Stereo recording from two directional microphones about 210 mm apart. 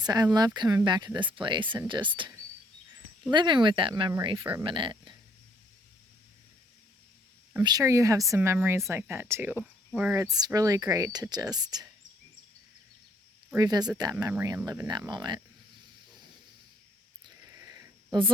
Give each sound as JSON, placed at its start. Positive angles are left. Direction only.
{"t": 0.0, "sound": "speech", "side_deg": -20}
{"t": 7.5, "sound": "speech", "side_deg": -20}
{"t": 10.2, "sound": "speech", "side_deg": -20}
{"t": 13.5, "sound": "speech", "side_deg": -20}
{"t": 17.2, "sound": "a sound", "side_deg": -15}